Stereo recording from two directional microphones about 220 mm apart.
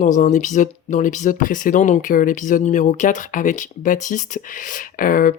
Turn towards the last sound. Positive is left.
turn(degrees=40)  # may be behind; listen again after turning